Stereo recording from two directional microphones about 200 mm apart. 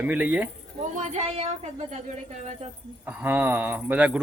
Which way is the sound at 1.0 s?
35° right (ahead or behind).